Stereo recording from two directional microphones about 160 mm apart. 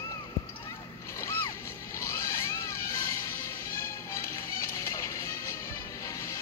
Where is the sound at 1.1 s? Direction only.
20° left (ahead or behind).